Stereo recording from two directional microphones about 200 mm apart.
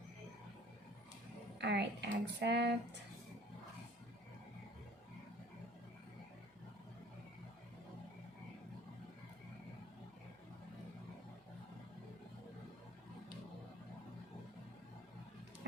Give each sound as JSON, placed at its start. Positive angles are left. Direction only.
{"t": 1.5, "sound": "speech", "side_deg": -55}